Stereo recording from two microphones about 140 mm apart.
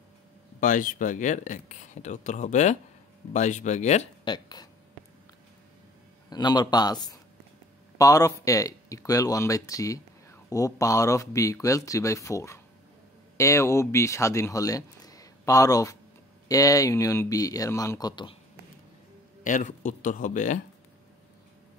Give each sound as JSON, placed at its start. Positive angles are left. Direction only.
{"t": 0.6, "sound": "speech", "side_deg": 70}
{"t": 4.2, "sound": "speech", "side_deg": 30}
{"t": 6.3, "sound": "speech", "side_deg": 30}
{"t": 19.4, "sound": "speech", "side_deg": 65}